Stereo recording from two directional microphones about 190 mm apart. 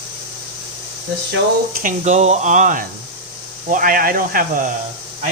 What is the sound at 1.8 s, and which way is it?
Speech, 40° right (ahead or behind).